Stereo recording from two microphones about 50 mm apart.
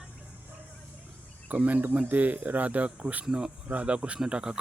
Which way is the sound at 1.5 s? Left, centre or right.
Right.